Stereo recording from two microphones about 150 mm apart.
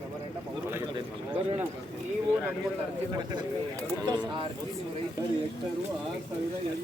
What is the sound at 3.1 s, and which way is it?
Speech, 30° right (ahead or behind).